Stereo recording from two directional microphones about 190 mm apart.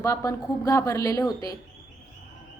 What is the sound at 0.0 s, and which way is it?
A woman's voice, 15° left (ahead or behind).